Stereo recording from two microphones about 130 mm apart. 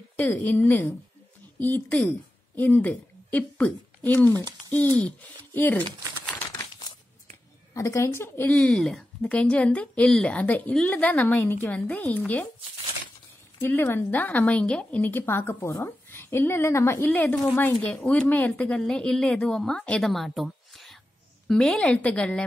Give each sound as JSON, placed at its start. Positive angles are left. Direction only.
{"t": 0.1, "sound": "a woman's voice", "side_deg": 10}
{"t": 5.5, "sound": "a woman's voice", "side_deg": 15}
{"t": 6.7, "sound": "crumpling", "side_deg": 35}
{"t": 7.7, "sound": "a woman's voice", "side_deg": 25}
{"t": 13.6, "sound": "a woman's voice", "side_deg": 15}